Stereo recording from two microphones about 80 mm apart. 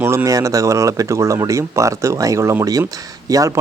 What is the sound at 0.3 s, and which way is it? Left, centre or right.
Speech, right.